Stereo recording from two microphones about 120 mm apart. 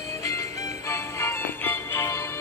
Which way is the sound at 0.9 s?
20° left (ahead or behind).